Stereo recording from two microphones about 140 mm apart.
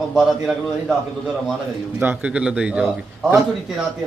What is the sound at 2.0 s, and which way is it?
A man's voice, 10° right (ahead or behind).